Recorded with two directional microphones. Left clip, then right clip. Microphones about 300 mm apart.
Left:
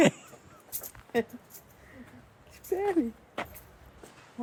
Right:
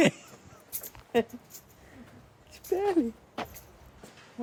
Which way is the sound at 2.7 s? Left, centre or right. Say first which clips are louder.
Right 1 dB; centre.